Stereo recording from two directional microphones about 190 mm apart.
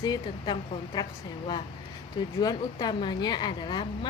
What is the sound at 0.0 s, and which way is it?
Speech, 25° left (ahead or behind).